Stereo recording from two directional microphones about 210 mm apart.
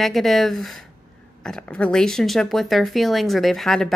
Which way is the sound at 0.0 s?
Centre (ahead or behind).